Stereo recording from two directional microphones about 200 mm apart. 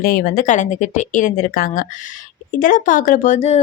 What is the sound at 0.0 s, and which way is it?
Speech, 45° left (ahead or behind).